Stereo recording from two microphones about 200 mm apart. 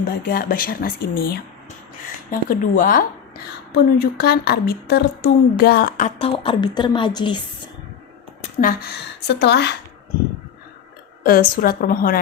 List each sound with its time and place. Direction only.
0.0 s speech: 45° left (ahead or behind)
2.5 s speech: 40° left (ahead or behind)
6.1 s a woman's voice: 30° left (ahead or behind)
8.4 s a woman's voice: 45° left (ahead or behind)
11.2 s speech: 50° left (ahead or behind)